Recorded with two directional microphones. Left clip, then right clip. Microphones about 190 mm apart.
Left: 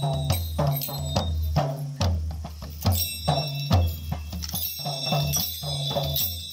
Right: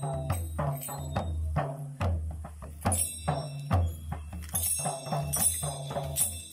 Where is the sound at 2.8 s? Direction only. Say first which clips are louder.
Left 5 dB; 15° left (ahead or behind).